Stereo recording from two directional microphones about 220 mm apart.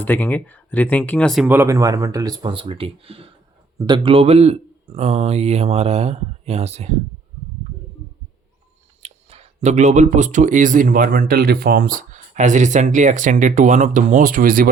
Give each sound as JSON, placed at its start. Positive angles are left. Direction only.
{"t": 0.0, "sound": "speech", "side_deg": 10}
{"t": 9.0, "sound": "speech", "side_deg": -30}